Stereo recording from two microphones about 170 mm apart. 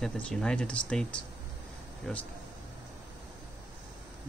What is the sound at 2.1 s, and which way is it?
Speech, 5° left (ahead or behind).